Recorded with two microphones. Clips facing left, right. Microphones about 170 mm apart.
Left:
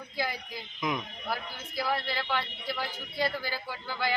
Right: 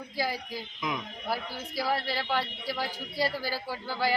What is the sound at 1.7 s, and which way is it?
Speech, 40° right (ahead or behind).